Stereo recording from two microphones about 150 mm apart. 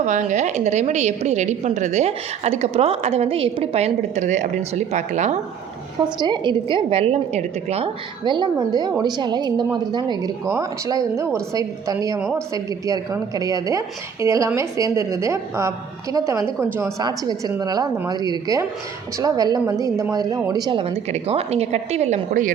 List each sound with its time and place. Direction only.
0.0 s a woman's voice: 55° right (ahead or behind)
6.1 s a woman's voice: 30° right (ahead or behind); by 7.9 s 45° right (ahead or behind)
8.2 s a woman's voice: 30° right (ahead or behind)
17.0 s a woman's voice: 25° right (ahead or behind); by 22.2 s 45° right (ahead or behind)
22.3 s a woman's voice: 65° right (ahead or behind)